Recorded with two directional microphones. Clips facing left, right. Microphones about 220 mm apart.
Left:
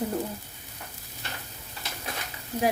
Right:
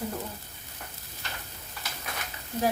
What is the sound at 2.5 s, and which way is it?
Speech, 10° left (ahead or behind).